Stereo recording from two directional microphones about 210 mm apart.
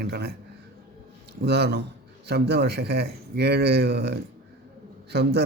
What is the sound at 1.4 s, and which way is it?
A man's voice, 50° right (ahead or behind).